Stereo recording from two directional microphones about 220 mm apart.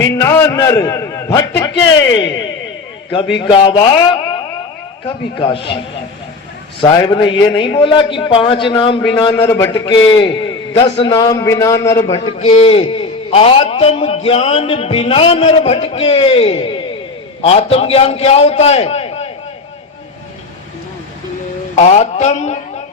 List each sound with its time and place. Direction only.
0.0 s a man's voice: 10° left (ahead or behind)
3.3 s a man's voice: 20° left (ahead or behind)
5.4 s a man's voice: 20° left (ahead or behind)
6.8 s a man's voice: 20° left (ahead or behind)
21.8 s a man's voice: 30° left (ahead or behind)